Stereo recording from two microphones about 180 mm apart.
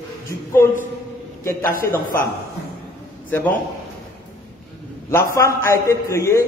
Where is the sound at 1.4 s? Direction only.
15° left (ahead or behind).